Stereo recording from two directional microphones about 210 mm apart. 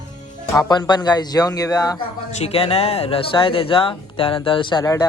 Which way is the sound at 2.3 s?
30° left (ahead or behind).